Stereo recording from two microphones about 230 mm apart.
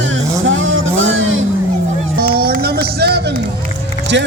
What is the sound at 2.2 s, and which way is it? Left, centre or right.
Music, right.